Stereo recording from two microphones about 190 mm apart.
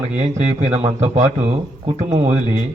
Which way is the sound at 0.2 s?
35° right (ahead or behind).